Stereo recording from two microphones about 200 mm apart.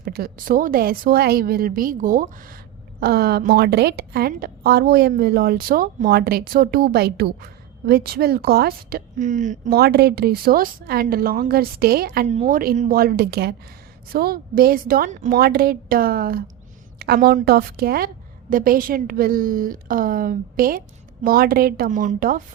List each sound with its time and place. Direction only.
0.0 s a woman's voice: 50° right (ahead or behind)
12.3 s a woman's voice: 40° right (ahead or behind)